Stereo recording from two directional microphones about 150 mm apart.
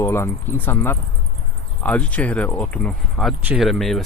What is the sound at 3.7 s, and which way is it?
Speech, centre (ahead or behind).